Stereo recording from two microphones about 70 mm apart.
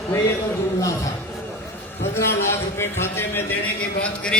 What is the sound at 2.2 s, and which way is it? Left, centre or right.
A man's voice, left.